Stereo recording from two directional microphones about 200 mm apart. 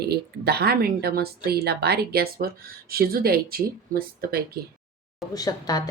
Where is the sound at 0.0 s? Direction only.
50° right (ahead or behind).